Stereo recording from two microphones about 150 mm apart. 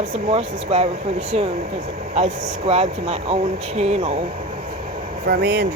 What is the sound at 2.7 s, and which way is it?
Speech, 45° right (ahead or behind).